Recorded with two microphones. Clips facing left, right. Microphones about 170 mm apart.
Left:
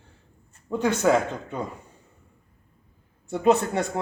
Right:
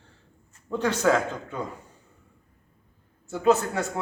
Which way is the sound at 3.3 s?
25° left (ahead or behind).